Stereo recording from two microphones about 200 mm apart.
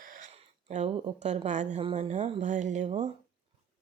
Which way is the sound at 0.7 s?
30° right (ahead or behind).